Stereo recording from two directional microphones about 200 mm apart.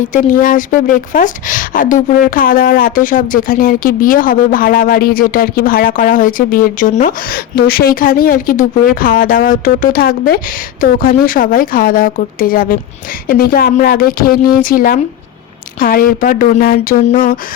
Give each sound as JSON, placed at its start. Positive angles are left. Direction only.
{"t": 0.1, "sound": "speech", "side_deg": 40}